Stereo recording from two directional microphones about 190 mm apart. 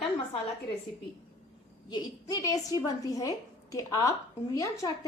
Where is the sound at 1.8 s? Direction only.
20° left (ahead or behind).